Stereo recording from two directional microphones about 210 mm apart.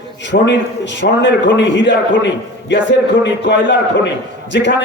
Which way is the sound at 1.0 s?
55° left (ahead or behind).